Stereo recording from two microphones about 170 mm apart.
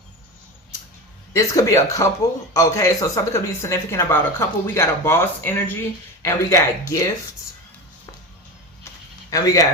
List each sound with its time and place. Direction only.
1.3 s speech: 20° left (ahead or behind)
9.3 s speech: 20° left (ahead or behind)